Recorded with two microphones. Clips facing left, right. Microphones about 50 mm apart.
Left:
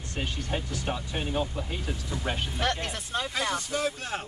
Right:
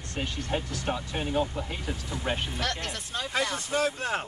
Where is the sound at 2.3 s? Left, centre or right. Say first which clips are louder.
Right 2 dB; centre.